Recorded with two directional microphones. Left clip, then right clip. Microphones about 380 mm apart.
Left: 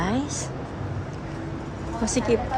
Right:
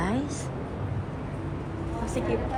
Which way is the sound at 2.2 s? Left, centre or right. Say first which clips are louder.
Left 5 dB; centre.